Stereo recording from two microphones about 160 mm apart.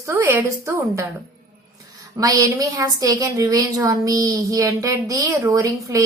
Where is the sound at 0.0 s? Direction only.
15° right (ahead or behind).